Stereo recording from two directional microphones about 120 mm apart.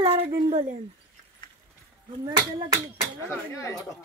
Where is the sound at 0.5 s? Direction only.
90° right.